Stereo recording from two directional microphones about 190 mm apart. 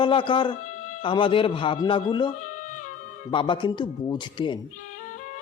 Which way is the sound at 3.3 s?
25° left (ahead or behind).